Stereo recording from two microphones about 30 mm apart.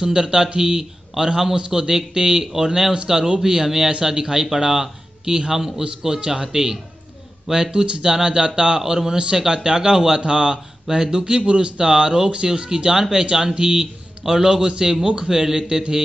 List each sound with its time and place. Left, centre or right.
0.0 s a man's voice: right
7.7 s a man's voice: right
8.7 s a man's voice: centre; by 10.6 s right
10.9 s a man's voice: centre
11.4 s speech: right
11.8 s a man's voice: right